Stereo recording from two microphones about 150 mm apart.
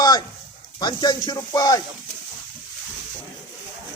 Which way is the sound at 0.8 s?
30° left (ahead or behind).